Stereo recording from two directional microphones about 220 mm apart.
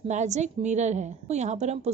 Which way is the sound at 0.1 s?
30° right (ahead or behind).